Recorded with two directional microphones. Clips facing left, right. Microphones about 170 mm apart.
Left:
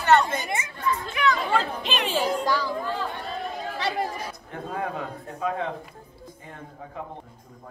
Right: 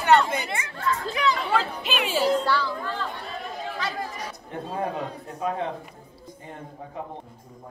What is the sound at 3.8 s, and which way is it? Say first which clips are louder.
Chatter: left 5 dB; 30° left (ahead or behind).